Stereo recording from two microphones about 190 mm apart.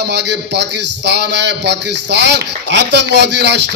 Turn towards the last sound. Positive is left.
turn(degrees=-65)  # may be behind; listen again after turning